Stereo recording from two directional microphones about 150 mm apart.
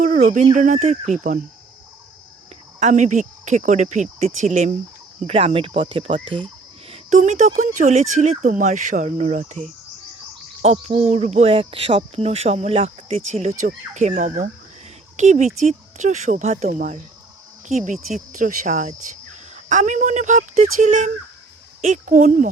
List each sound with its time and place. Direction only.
0.0 s a sound: 55° right (ahead or behind)
0.5 s speech: 55° right (ahead or behind)
2.8 s speech: 55° right (ahead or behind)
5.2 s speech: 40° right (ahead or behind)
6.9 s speech: 50° right (ahead or behind)